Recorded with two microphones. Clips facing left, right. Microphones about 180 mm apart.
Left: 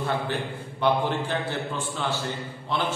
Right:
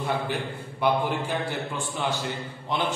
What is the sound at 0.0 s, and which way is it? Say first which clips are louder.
A man's voice: even; 10° right (ahead or behind).